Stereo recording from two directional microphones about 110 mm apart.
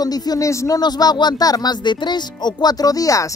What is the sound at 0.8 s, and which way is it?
Speech, 40° left (ahead or behind).